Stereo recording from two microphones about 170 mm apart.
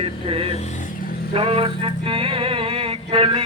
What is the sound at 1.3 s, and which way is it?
Mantra, 35° right (ahead or behind).